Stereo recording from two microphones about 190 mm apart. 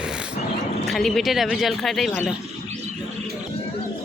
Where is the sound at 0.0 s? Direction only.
5° right (ahead or behind).